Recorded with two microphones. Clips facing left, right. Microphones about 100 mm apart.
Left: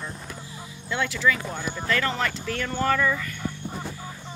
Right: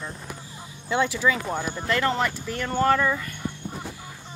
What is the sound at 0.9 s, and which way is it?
Speech, 20° right (ahead or behind).